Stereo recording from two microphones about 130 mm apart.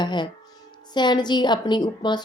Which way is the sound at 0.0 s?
35° left (ahead or behind).